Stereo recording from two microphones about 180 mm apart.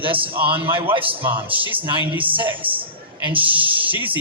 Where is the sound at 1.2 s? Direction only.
10° right (ahead or behind).